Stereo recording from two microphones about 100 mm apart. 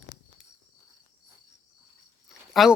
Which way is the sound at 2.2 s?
Centre (ahead or behind).